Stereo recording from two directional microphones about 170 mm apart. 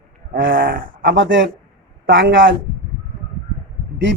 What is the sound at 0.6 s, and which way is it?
Speech, 60° right (ahead or behind).